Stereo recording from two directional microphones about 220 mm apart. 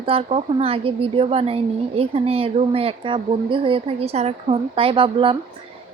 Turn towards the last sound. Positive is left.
turn(degrees=-25)  # may be behind; listen again after turning